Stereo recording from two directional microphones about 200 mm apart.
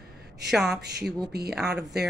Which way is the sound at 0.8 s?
55° right (ahead or behind).